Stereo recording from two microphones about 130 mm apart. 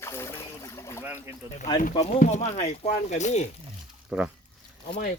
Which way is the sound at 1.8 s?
75° left (ahead or behind).